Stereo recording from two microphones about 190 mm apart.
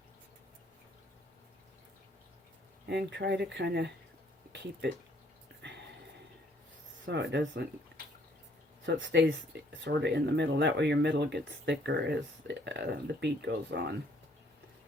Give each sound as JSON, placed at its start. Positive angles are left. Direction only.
{"t": 2.8, "sound": "speech", "side_deg": -60}
{"t": 5.6, "sound": "a sound", "side_deg": -65}
{"t": 7.0, "sound": "speech", "side_deg": -65}
{"t": 8.9, "sound": "speech", "side_deg": -70}